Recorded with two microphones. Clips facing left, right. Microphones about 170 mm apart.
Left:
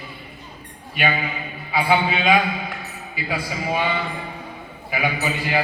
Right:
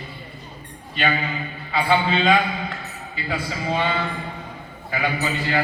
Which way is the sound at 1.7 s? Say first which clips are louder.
Even; 10° left (ahead or behind).